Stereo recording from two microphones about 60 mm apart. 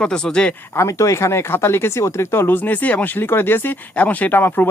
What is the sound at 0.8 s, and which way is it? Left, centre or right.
Speech, left.